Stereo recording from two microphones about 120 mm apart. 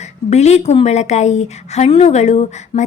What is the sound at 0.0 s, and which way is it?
Speech, 70° left (ahead or behind).